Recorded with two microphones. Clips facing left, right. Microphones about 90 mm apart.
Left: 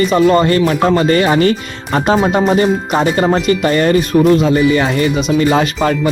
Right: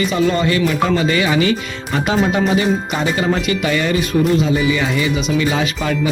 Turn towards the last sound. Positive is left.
turn(degrees=50)  # may be behind; listen again after turning